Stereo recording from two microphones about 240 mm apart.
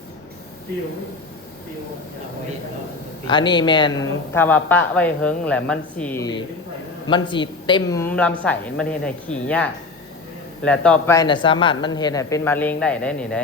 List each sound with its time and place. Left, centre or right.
3.2 s speech: centre